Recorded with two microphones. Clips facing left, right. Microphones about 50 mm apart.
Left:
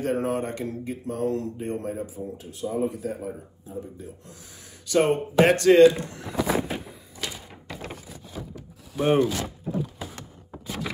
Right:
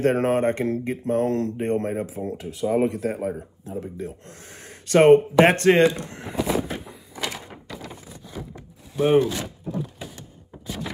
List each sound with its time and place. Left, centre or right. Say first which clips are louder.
0.0 s speech: right 6 dB; right
2.0 s speech: right 5 dB; right
4.5 s a sound: right 8 dB; right
5.4 s speech: left 1 dB; right
8.9 s speech: right 3 dB; centre